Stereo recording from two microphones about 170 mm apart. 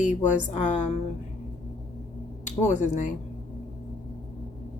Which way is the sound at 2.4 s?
45° left (ahead or behind).